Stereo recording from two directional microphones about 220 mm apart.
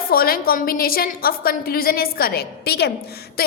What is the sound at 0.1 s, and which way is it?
A woman's voice, 40° left (ahead or behind).